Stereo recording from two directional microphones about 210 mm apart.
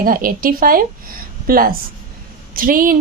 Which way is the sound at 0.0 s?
40° right (ahead or behind).